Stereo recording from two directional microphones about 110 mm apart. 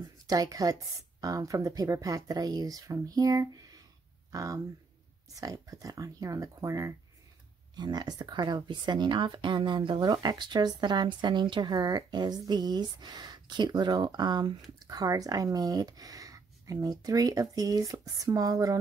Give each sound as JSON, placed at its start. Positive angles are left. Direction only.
{"t": 0.3, "sound": "speech", "side_deg": -35}